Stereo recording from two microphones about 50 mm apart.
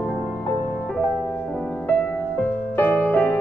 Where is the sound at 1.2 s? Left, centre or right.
Left.